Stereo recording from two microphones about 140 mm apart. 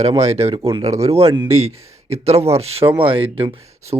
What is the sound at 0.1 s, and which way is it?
Speech, 20° right (ahead or behind).